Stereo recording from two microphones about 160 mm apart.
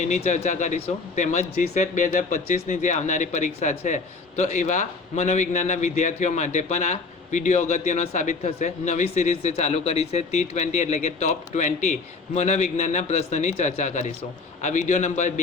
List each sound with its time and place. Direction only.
0.0 s speech: 50° left (ahead or behind)